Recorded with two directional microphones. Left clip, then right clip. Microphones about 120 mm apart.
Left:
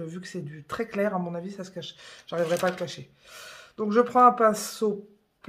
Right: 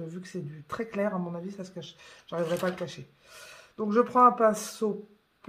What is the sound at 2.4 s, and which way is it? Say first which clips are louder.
Speech: left 4 dB; 40° left (ahead or behind).